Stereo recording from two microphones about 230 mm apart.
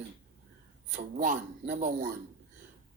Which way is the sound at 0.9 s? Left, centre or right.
Right.